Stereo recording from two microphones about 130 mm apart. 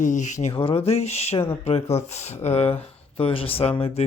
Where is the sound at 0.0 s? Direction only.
70° left (ahead or behind).